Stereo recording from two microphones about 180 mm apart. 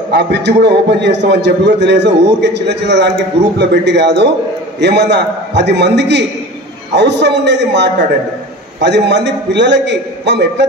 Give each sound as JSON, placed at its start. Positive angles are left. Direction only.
{"t": 0.1, "sound": "a man's voice", "side_deg": -70}